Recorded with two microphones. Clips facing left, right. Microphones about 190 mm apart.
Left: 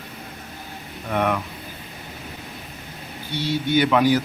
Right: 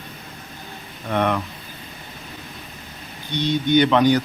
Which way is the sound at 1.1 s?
10° left (ahead or behind).